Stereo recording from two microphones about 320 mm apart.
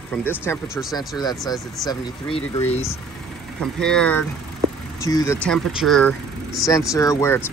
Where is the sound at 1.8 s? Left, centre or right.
Centre.